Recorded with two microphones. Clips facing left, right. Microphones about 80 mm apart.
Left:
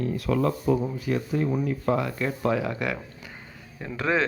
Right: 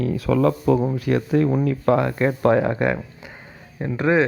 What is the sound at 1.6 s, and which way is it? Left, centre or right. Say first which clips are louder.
Speech: right 6 dB; right.